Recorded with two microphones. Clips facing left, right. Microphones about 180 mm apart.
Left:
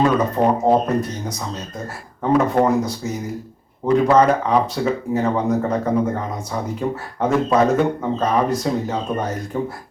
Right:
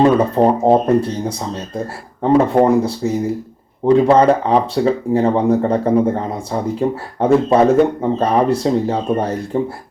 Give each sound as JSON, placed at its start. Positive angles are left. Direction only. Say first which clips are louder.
{"t": 0.0, "sound": "speech", "louder": "right 5 dB", "side_deg": -30}